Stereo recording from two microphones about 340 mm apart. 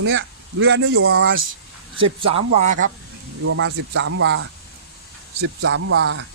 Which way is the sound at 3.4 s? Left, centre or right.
Right.